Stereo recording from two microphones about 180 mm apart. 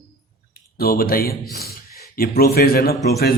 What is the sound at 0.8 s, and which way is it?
A man's voice, 55° left (ahead or behind).